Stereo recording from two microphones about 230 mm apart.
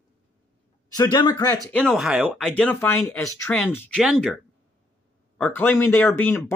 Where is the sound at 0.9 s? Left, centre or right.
Centre.